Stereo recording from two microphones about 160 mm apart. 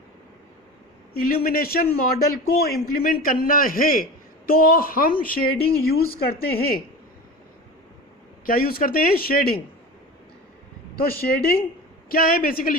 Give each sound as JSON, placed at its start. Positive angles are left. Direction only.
{"t": 1.2, "sound": "a man's voice", "side_deg": 65}
{"t": 8.4, "sound": "speech", "side_deg": 65}
{"t": 11.0, "sound": "a man's voice", "side_deg": 70}